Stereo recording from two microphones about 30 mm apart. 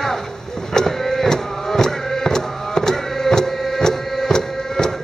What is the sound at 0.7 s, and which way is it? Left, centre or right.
Music, centre.